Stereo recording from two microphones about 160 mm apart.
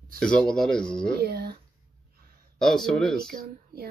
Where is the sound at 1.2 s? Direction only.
80° right.